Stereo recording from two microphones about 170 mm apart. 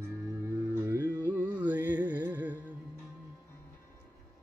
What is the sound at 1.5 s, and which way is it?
Music, 10° right (ahead or behind).